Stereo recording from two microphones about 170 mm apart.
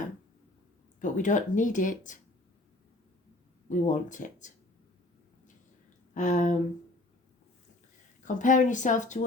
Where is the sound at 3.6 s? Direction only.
45° left (ahead or behind).